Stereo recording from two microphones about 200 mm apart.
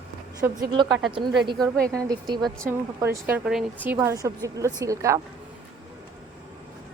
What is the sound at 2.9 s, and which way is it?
A woman's voice, 10° right (ahead or behind).